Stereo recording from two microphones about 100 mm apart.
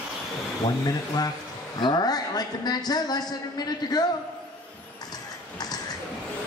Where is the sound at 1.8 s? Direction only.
45° left (ahead or behind).